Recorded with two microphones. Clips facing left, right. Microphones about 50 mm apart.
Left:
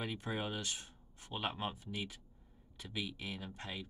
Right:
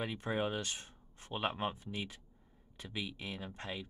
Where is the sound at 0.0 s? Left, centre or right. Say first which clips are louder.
Right 4 dB; right.